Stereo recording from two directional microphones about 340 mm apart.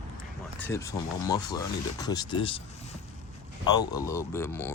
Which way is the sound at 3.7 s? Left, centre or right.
Centre.